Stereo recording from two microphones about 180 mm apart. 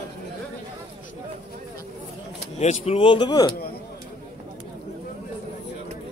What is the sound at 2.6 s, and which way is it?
Speech, 35° left (ahead or behind).